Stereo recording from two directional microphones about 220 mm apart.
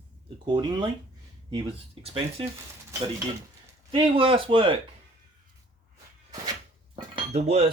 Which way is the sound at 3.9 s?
25° right (ahead or behind).